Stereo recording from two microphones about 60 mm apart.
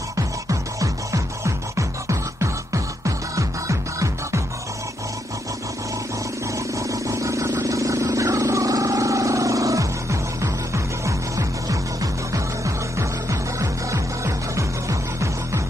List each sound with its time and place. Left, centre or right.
0.5 s music: right
6.9 s vehicle: right
13.3 s music: right